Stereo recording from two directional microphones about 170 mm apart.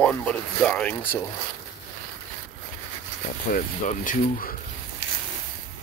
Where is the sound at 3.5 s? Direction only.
50° left (ahead or behind).